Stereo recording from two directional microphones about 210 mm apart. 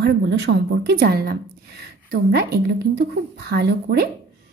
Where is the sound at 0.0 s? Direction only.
55° right (ahead or behind).